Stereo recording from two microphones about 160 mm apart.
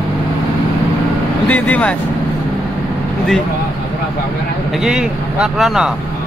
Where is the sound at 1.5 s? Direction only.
10° left (ahead or behind).